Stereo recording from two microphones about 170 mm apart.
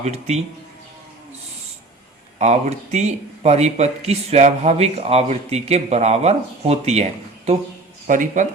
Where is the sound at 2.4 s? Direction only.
40° right (ahead or behind).